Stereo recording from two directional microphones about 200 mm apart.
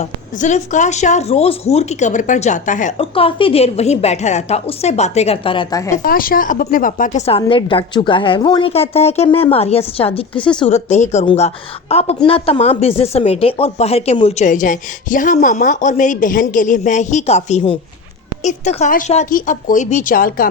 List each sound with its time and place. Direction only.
0.0 s a woman's voice: 35° left (ahead or behind); by 6.0 s 15° left (ahead or behind)
6.0 s a woman's voice: 45° left (ahead or behind)